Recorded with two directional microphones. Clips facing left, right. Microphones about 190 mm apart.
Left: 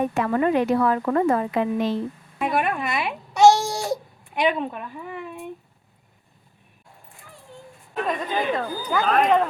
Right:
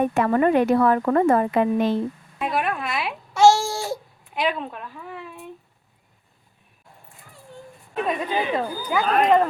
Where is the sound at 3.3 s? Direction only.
20° left (ahead or behind).